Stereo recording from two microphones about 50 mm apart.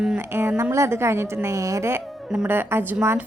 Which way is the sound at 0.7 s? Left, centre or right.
Right.